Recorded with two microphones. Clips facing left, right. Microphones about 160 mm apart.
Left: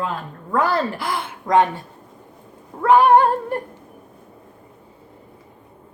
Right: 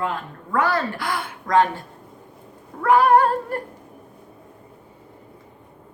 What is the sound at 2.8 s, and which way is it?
Female singing, 20° left (ahead or behind).